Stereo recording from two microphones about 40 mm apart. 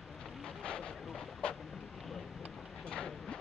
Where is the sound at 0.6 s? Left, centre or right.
Left.